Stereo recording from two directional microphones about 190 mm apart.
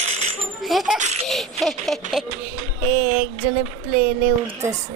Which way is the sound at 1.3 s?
Centre (ahead or behind).